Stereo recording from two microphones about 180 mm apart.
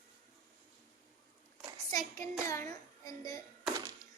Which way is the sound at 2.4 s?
15° left (ahead or behind).